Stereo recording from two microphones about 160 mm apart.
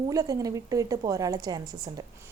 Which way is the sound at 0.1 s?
20° right (ahead or behind).